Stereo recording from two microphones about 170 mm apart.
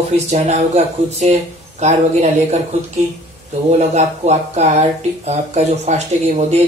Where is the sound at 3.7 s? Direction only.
40° right (ahead or behind).